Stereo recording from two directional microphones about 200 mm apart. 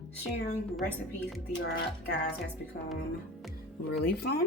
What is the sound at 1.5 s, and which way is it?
Speech, 60° left (ahead or behind).